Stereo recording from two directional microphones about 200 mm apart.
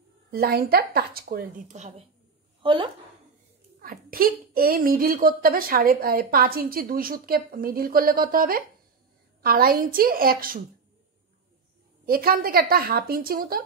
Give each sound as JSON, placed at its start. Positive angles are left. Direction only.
{"t": 0.3, "sound": "a woman's voice", "side_deg": -50}
{"t": 3.8, "sound": "a woman's voice", "side_deg": -45}
{"t": 12.1, "sound": "a woman's voice", "side_deg": -45}